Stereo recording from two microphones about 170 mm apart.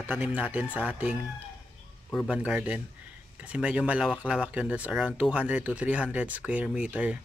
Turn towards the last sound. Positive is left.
turn(degrees=-5)  # may be behind; listen again after turning